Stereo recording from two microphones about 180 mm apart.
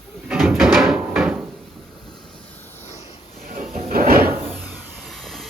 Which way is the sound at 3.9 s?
55° right (ahead or behind).